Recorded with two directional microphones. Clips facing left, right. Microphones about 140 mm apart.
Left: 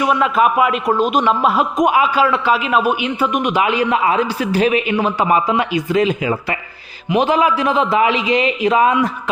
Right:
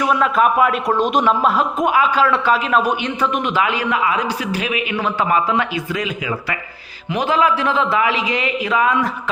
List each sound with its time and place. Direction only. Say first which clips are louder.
0.0 s a man's voice: left 1 dB; 5° left (ahead or behind)
2.2 s a man's voice: left 1 dB; 5° left (ahead or behind); by 5.1 s 30° left (ahead or behind)
5.2 s a man's voice: even; 15° left (ahead or behind)
5.9 s a man's voice: left 7 dB; 30° left (ahead or behind)
7.1 s a man's voice: left 3 dB; 20° left (ahead or behind)